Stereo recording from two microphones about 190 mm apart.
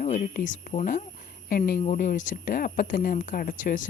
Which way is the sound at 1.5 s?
50° left (ahead or behind).